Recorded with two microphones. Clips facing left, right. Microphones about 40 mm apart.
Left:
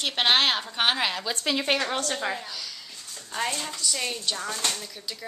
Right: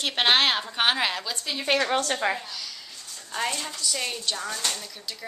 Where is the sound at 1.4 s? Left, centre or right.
Left.